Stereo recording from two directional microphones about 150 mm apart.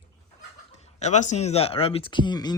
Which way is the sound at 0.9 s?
50° left (ahead or behind).